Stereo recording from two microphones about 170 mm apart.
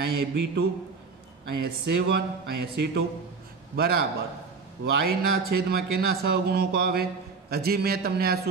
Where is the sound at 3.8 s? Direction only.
65° right (ahead or behind).